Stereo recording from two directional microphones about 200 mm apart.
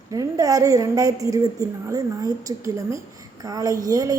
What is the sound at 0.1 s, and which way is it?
A woman's voice, 15° right (ahead or behind).